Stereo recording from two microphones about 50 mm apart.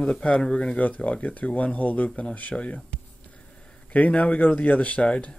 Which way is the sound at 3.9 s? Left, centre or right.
Left.